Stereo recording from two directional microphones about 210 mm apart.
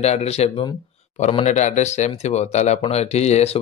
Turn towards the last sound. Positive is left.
turn(degrees=30)  # may be behind; listen again after turning